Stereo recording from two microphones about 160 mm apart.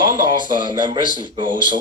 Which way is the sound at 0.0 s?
30° right (ahead or behind).